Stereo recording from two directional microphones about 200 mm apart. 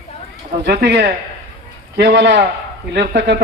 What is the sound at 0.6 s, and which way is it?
A man's voice, 55° right (ahead or behind).